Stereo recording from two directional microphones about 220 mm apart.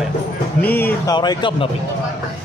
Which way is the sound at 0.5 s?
10° left (ahead or behind).